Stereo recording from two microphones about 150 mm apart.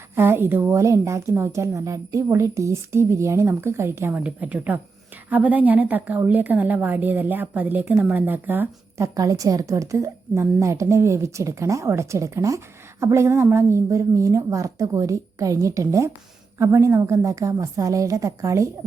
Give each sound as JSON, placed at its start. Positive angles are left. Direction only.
{"t": 0.2, "sound": "a woman's voice", "side_deg": -15}